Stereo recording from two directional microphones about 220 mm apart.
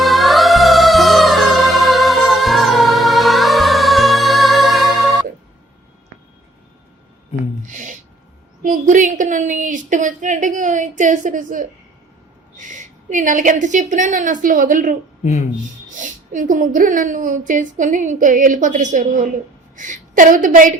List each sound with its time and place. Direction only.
0.0 s music: centre (ahead or behind)
7.7 s a sound: 35° right (ahead or behind)
8.6 s a woman's voice: 35° right (ahead or behind)
16.0 s a woman's voice: 35° right (ahead or behind)